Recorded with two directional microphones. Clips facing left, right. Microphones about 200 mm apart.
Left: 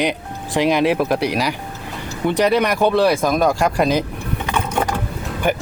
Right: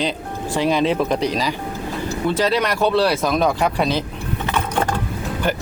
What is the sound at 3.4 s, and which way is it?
Speech, centre (ahead or behind).